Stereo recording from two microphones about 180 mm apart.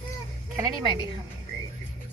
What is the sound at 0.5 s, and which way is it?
Speech, 20° right (ahead or behind).